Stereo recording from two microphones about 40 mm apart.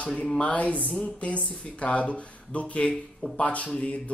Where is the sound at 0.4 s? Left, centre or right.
Left.